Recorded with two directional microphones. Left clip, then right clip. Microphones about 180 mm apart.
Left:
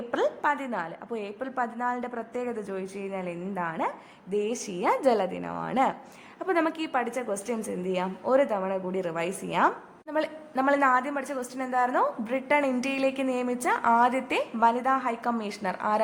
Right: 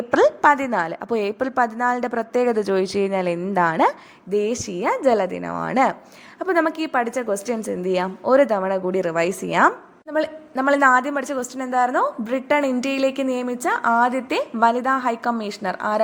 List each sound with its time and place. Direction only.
0.4 s a woman's voice: 30° right (ahead or behind)
4.3 s a woman's voice: 25° right (ahead or behind)